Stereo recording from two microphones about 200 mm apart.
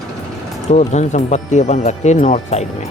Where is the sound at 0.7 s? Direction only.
35° left (ahead or behind).